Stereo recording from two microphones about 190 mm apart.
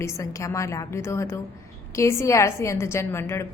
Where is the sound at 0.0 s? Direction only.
15° left (ahead or behind).